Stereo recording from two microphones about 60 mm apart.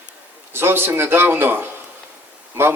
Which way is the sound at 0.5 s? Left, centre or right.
Right.